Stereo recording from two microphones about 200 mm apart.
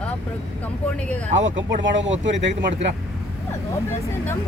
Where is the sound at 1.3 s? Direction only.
70° right (ahead or behind).